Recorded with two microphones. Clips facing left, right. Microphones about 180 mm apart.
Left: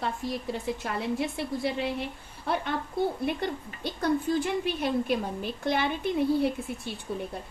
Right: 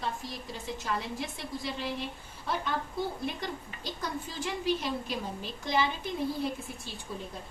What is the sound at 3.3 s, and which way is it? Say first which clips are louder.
A woman's voice: left 6 dB; 60° left (ahead or behind).